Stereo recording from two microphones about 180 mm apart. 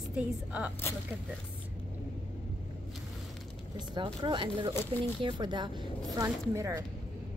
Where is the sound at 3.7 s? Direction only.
25° right (ahead or behind).